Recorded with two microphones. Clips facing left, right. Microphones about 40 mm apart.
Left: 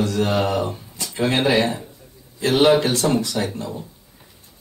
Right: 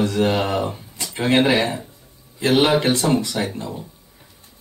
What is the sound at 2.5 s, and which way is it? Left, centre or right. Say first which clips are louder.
Speech: left 1 dB; centre.